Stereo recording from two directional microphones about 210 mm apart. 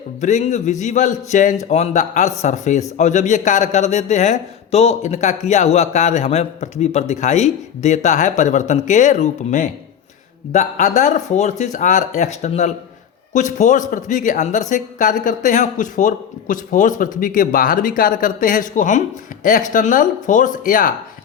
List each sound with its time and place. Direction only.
0.2 s speech: 35° left (ahead or behind)